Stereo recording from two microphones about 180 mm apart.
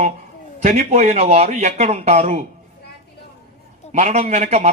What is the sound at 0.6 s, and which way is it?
A man's voice, 40° right (ahead or behind).